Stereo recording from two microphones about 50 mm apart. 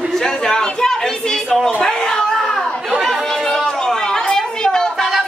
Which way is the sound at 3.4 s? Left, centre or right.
Centre.